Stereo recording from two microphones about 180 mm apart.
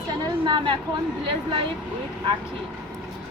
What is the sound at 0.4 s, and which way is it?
Speech, 25° right (ahead or behind).